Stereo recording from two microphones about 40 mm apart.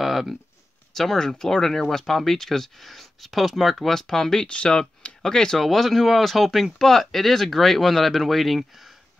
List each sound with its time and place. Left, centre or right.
0.0 s a sound: centre
0.9 s speech: centre
4.5 s speech: left
5.6 s speech: centre